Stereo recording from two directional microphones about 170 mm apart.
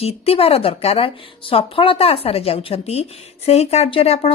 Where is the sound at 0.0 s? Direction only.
35° left (ahead or behind).